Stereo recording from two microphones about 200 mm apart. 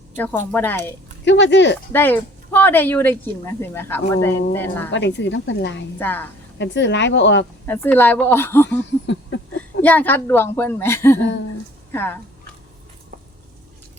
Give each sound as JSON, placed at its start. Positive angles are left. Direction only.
{"t": 0.2, "sound": "speech", "side_deg": 10}
{"t": 1.2, "sound": "a woman's voice", "side_deg": 60}
{"t": 1.9, "sound": "speech", "side_deg": 10}
{"t": 4.9, "sound": "a woman's voice", "side_deg": 60}
{"t": 6.0, "sound": "speech", "side_deg": 10}
{"t": 6.6, "sound": "a woman's voice", "side_deg": 60}
{"t": 7.7, "sound": "speech", "side_deg": 10}
{"t": 9.0, "sound": "a sound", "side_deg": 65}
{"t": 9.8, "sound": "speech", "side_deg": 10}